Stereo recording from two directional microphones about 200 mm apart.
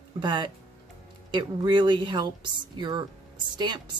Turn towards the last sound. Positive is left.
turn(degrees=-25)  # may be behind; listen again after turning